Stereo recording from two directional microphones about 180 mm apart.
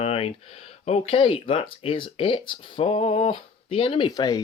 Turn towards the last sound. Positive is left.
turn(degrees=20)  # may be behind; listen again after turning